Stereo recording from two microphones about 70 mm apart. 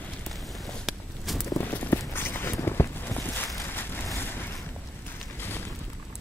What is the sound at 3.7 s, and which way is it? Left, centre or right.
Vehicle, left.